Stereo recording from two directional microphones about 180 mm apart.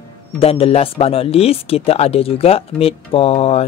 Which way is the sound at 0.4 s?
30° left (ahead or behind).